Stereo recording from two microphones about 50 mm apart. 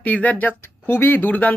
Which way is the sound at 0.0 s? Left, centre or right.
Left.